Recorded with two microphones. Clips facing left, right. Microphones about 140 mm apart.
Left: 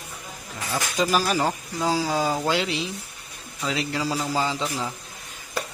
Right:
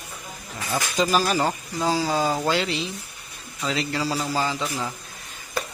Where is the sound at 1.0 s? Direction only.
5° left (ahead or behind).